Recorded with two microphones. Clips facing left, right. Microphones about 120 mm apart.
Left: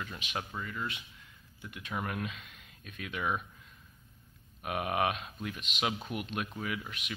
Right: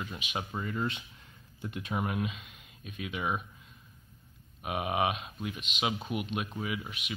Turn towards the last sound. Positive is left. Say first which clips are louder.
# right 1 dB
turn(degrees=-10)  # may be behind; listen again after turning